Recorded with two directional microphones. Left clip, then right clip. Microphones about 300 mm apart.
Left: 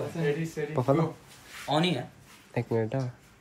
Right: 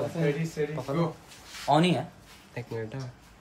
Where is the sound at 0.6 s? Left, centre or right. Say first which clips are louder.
Left 3 dB; centre.